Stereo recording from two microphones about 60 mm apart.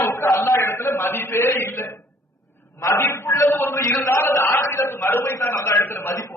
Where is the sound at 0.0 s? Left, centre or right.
Left.